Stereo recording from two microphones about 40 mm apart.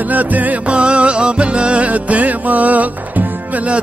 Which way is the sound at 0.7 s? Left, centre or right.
Right.